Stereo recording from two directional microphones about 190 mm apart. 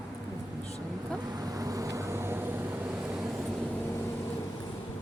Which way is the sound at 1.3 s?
20° right (ahead or behind).